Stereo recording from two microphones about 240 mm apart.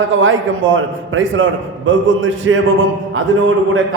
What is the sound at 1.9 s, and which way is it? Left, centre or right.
Speech, right.